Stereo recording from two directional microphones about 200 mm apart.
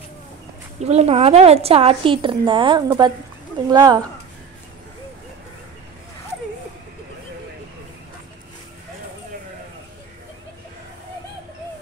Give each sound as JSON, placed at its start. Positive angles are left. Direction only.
{"t": 0.7, "sound": "a woman's voice", "side_deg": -30}